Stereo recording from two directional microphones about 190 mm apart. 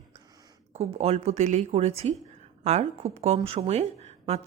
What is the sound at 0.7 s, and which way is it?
A woman's voice, 35° right (ahead or behind).